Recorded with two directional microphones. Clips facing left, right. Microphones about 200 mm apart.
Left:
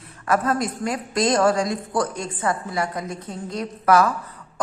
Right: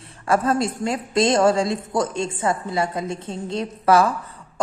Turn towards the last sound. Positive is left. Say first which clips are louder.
# right 1 dB
turn(degrees=-30)  # may be behind; listen again after turning